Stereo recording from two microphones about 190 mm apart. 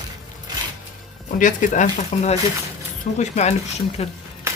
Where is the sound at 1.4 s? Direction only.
40° left (ahead or behind).